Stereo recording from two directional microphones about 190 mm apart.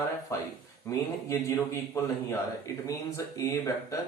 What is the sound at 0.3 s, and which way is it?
A man's voice, 15° left (ahead or behind).